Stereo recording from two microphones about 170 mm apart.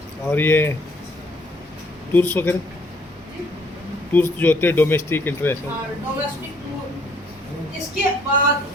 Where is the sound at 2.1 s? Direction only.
10° left (ahead or behind).